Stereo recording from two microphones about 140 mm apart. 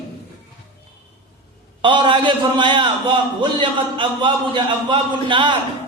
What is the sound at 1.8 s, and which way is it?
A man's voice, 35° right (ahead or behind).